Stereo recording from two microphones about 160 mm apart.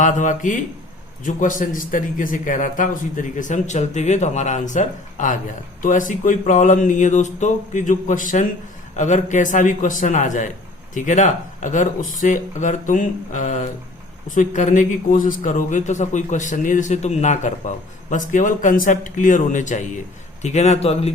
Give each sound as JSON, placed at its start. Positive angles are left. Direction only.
{"t": 0.0, "sound": "a man's voice", "side_deg": 50}